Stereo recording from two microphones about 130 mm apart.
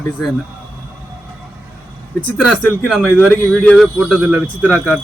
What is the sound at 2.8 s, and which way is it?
A man's voice, centre (ahead or behind).